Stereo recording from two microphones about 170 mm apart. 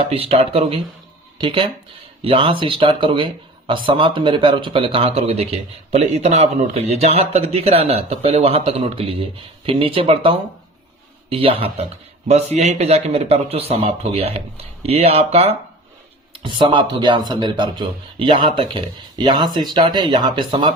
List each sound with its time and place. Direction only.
0.0 s speech: 35° right (ahead or behind)